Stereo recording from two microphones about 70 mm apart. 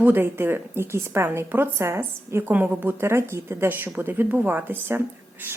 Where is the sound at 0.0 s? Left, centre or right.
Right.